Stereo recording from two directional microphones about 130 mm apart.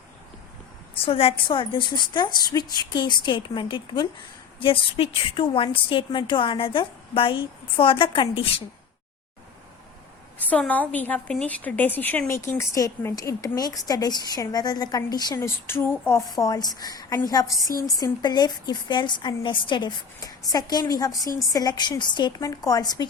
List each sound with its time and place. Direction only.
0.9 s a woman's voice: 45° left (ahead or behind)
10.4 s a woman's voice: 10° left (ahead or behind); by 15.4 s 30° left (ahead or behind)
15.4 s a woman's voice: 20° left (ahead or behind)
16.3 s a woman's voice: 30° left (ahead or behind)